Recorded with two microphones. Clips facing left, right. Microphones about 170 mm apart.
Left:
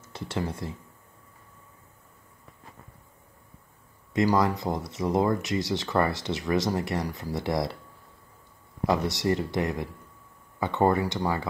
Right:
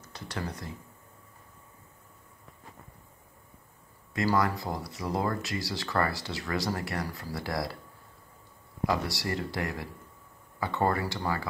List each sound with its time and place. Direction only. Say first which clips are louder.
0.0 s speech: left 5 dB; 25° left (ahead or behind)
4.1 s speech: left 4 dB; 20° left (ahead or behind)
8.8 s speech: left 5 dB; 20° left (ahead or behind)